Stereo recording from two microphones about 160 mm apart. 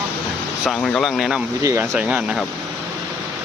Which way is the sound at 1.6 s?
20° right (ahead or behind).